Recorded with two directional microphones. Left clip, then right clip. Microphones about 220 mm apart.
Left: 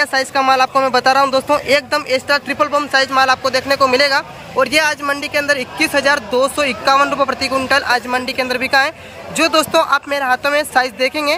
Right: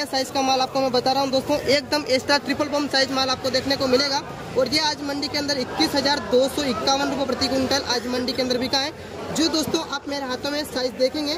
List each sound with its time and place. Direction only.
0.0 s speech: centre (ahead or behind)
6.1 s speech: 20° left (ahead or behind)
6.5 s speech: centre (ahead or behind)
9.4 s speech: 20° left (ahead or behind)
10.0 s speech: centre (ahead or behind)
10.7 s speech: 20° left (ahead or behind)